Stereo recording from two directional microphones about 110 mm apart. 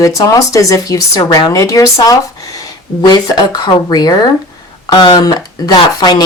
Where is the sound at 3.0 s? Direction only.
40° left (ahead or behind).